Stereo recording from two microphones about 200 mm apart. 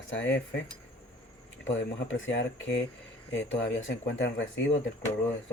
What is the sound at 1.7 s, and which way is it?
Speech, 65° left (ahead or behind).